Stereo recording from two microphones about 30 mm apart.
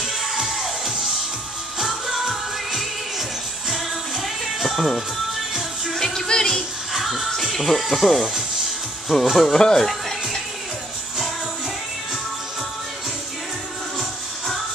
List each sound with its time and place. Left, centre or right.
0.0 s music: centre
5.5 s music: centre
5.9 s music: centre
6.9 s music: centre
7.5 s speech: centre
9.2 s speech: centre
9.5 s speech: left
9.8 s speech: centre